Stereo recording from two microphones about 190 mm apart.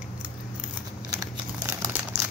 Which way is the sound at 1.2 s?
20° right (ahead or behind).